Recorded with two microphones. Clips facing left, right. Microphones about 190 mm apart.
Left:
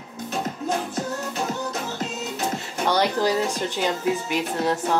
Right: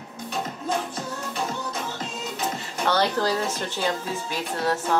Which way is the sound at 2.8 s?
15° left (ahead or behind).